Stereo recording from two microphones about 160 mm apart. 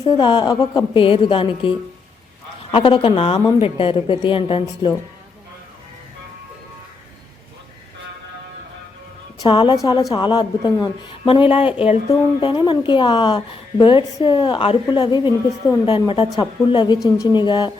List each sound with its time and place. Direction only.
0.0 s a woman's voice: 30° left (ahead or behind)
2.7 s a woman's voice: 35° left (ahead or behind)
9.4 s a woman's voice: 30° left (ahead or behind)